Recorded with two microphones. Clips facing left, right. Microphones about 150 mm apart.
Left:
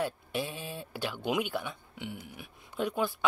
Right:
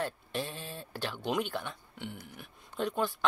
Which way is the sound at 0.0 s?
10° left (ahead or behind).